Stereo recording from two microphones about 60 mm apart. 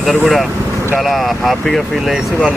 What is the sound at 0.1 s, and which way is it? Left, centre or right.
Speech, centre.